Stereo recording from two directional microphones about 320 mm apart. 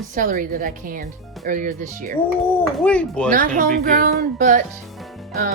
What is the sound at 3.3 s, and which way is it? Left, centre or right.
Speech, right.